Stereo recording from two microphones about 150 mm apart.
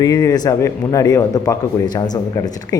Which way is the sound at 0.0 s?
25° left (ahead or behind).